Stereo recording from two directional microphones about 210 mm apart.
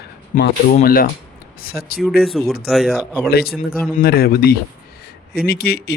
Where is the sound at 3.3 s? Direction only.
50° left (ahead or behind).